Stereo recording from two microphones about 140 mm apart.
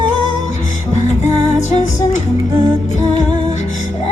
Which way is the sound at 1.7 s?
60° left (ahead or behind).